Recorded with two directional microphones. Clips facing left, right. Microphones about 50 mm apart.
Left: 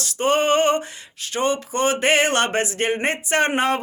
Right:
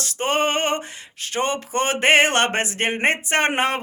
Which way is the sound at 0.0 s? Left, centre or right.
Right.